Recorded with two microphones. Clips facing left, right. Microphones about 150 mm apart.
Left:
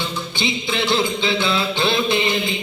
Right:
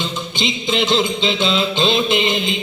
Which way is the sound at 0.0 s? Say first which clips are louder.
Right 1 dB; 20° right (ahead or behind).